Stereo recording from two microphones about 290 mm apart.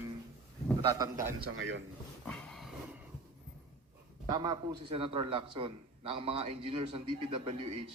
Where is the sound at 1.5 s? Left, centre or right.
Right.